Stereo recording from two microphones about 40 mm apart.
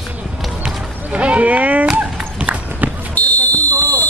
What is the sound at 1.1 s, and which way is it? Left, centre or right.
Speech, right.